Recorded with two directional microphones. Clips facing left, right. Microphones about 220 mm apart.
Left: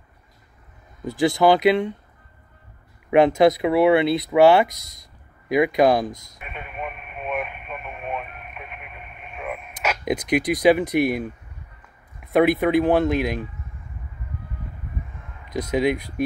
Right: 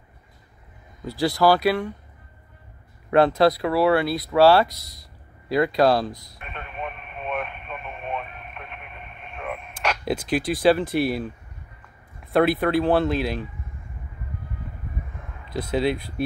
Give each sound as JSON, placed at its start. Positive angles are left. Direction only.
{"t": 1.2, "sound": "speech", "side_deg": 20}
{"t": 3.1, "sound": "speech", "side_deg": 15}
{"t": 6.4, "sound": "radio", "side_deg": 5}
{"t": 10.0, "sound": "speech", "side_deg": 20}
{"t": 15.7, "sound": "speech", "side_deg": 15}